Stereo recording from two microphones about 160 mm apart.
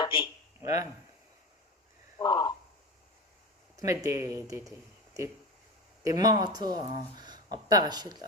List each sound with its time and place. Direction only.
0.0 s a sound: 35° left (ahead or behind)
0.6 s speech: 20° right (ahead or behind)
2.1 s speech: 25° left (ahead or behind)
3.8 s speech: 20° right (ahead or behind)
6.1 s speech: 25° right (ahead or behind)